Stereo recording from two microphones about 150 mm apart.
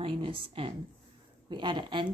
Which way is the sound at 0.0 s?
40° right (ahead or behind).